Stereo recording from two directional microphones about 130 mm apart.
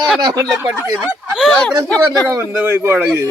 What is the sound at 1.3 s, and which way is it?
Speech, 5° left (ahead or behind).